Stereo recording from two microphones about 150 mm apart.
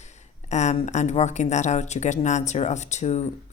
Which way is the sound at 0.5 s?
50° left (ahead or behind).